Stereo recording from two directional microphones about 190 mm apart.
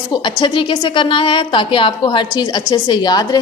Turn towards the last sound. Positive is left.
turn(degrees=20)  # may be behind; listen again after turning